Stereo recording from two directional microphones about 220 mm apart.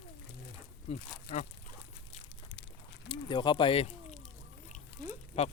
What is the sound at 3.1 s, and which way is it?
Speech, 20° left (ahead or behind).